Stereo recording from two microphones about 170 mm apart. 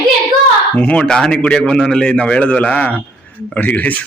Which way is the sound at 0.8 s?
5° left (ahead or behind).